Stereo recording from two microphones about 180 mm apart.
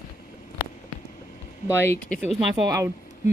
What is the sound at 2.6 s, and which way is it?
Speech, 20° right (ahead or behind).